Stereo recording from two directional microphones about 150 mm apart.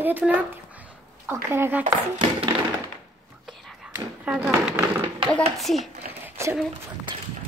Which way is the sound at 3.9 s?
10° right (ahead or behind).